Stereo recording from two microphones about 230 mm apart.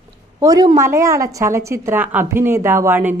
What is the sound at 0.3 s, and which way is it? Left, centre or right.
A woman's voice, centre.